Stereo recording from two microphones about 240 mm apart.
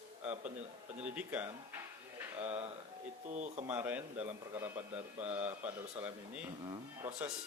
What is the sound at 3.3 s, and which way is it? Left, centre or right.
Speech, right.